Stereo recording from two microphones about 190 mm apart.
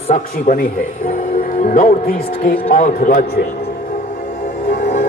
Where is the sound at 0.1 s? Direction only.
45° left (ahead or behind).